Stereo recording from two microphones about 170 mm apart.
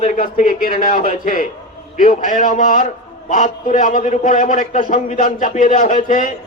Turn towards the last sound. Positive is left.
turn(degrees=50)  # may be behind; listen again after turning